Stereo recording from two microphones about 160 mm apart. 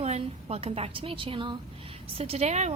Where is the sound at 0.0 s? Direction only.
40° right (ahead or behind).